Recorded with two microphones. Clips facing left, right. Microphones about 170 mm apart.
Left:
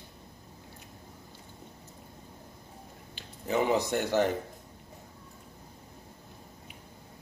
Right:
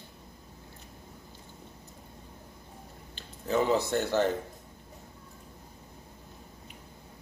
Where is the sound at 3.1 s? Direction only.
15° left (ahead or behind).